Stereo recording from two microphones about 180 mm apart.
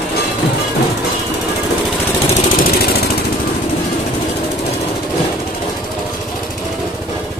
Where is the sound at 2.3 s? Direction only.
55° left (ahead or behind).